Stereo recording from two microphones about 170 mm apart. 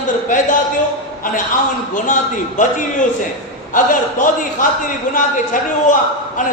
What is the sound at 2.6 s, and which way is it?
A man's voice, 45° left (ahead or behind).